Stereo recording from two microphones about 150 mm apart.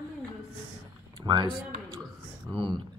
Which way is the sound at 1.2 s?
30° right (ahead or behind).